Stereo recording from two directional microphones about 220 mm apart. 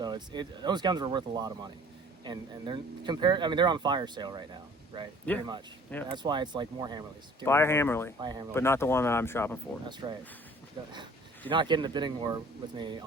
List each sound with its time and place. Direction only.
0.0 s speech: 20° right (ahead or behind)
5.3 s speech: 5° left (ahead or behind)
6.1 s speech: 20° right (ahead or behind)
7.4 s speech: 10° left (ahead or behind)
8.2 s speech: 20° right (ahead or behind)
8.5 s speech: 10° left (ahead or behind)
10.0 s speech: 20° right (ahead or behind)
11.4 s speech: 20° right (ahead or behind)